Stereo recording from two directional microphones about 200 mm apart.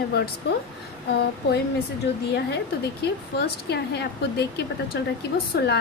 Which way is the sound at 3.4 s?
55° left (ahead or behind).